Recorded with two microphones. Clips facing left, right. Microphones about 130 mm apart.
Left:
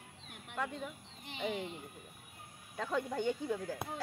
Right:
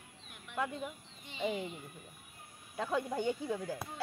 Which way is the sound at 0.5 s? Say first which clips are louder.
Right 2 dB; 15° right (ahead or behind).